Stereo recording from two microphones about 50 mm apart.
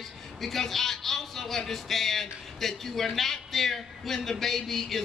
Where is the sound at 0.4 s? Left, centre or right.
Centre.